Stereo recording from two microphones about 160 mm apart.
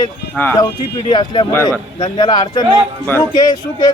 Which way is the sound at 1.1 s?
30° left (ahead or behind).